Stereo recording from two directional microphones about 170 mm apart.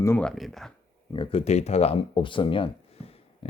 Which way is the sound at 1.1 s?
30° left (ahead or behind).